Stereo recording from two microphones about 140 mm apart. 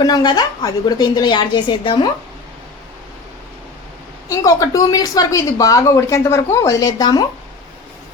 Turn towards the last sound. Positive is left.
turn(degrees=25)  # may be behind; listen again after turning